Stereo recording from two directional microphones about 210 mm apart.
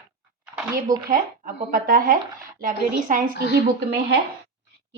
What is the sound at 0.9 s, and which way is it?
Speech, 40° right (ahead or behind).